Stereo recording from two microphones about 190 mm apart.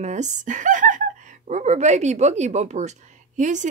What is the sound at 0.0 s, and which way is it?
Speech, 40° right (ahead or behind).